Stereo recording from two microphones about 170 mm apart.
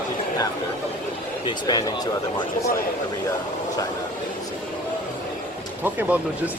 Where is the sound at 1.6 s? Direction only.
25° left (ahead or behind).